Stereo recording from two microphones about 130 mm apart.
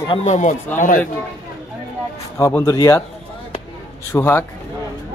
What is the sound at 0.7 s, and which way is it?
Speech, 90° left.